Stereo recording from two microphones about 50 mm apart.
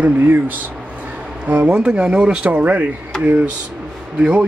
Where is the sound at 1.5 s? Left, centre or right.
Right.